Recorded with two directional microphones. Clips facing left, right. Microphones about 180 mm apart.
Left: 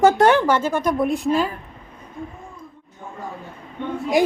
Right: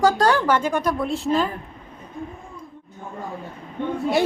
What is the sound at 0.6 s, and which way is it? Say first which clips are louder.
Speech: left 1 dB; 15° right (ahead or behind).